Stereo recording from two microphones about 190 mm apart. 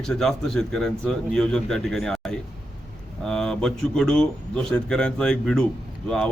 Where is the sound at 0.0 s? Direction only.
5° left (ahead or behind).